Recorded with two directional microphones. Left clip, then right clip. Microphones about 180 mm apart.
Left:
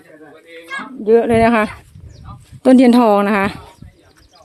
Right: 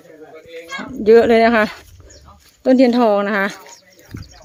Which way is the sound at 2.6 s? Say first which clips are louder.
Left 2 dB; 30° left (ahead or behind).